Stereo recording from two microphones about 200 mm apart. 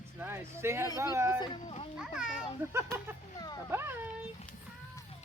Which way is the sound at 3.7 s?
10° right (ahead or behind).